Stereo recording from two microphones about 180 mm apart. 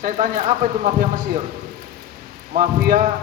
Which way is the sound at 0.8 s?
45° right (ahead or behind).